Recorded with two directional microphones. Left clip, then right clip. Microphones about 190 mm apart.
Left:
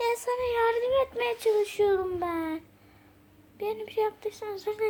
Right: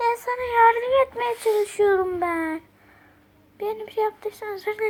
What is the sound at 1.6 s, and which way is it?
A child's voice, 20° right (ahead or behind).